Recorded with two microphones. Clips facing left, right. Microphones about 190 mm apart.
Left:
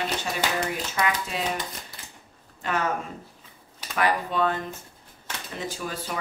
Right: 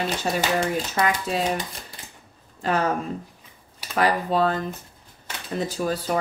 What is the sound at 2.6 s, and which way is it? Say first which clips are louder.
Speech: right 4 dB; 35° right (ahead or behind).